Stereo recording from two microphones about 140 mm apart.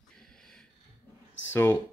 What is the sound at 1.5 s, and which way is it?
Speech, 15° left (ahead or behind).